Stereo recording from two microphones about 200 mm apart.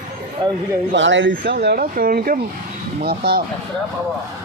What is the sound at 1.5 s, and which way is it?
Speech, 50° right (ahead or behind).